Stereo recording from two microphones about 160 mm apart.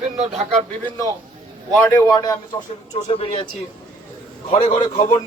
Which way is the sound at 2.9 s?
35° left (ahead or behind).